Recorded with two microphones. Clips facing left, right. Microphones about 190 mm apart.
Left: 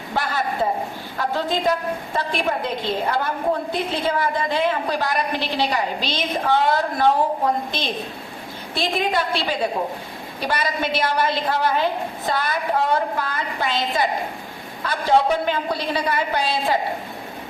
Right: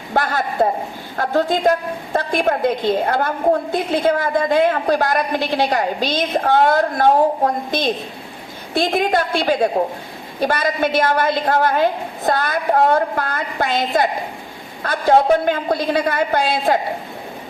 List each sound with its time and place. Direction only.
0.1 s a woman's voice: 50° right (ahead or behind)